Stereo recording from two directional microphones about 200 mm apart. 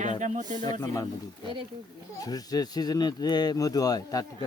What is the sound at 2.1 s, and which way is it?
Speech, 20° left (ahead or behind).